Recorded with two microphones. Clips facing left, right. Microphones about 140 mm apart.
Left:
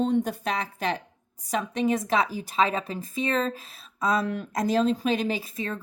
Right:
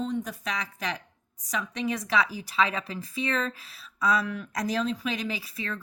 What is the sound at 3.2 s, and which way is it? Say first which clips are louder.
Speech: left 4 dB; 30° left (ahead or behind).